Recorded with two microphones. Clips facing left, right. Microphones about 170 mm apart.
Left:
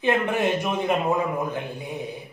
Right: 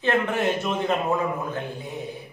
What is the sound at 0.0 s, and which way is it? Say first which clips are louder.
Speech: left 1 dB; 15° left (ahead or behind).